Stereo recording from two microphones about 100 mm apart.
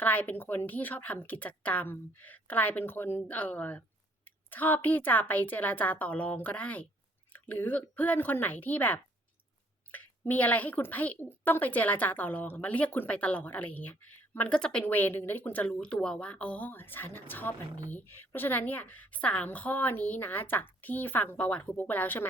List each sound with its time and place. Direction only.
0.0 s a woman's voice: 15° left (ahead or behind)